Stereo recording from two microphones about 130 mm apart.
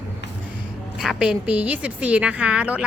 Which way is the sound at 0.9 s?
5° right (ahead or behind).